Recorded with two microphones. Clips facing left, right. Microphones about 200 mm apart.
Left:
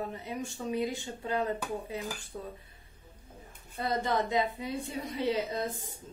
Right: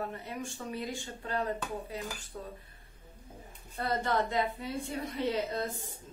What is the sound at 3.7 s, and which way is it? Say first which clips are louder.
A woman's voice: left 1 dB; 15° left (ahead or behind).